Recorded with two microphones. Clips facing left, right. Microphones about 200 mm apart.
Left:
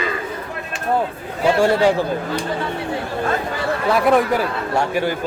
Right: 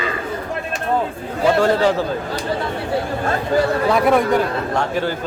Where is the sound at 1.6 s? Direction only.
15° left (ahead or behind).